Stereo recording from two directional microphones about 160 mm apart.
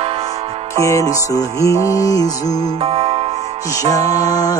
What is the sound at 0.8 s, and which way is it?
Music, 40° right (ahead or behind).